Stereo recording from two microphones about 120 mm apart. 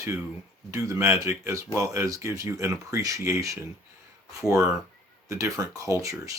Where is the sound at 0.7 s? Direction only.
25° right (ahead or behind).